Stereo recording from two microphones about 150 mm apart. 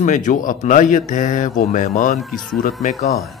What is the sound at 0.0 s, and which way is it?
Speech, 55° left (ahead or behind).